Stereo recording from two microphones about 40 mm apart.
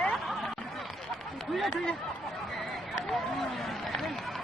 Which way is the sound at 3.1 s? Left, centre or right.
Centre.